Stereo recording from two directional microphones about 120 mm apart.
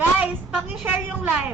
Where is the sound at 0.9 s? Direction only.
10° right (ahead or behind).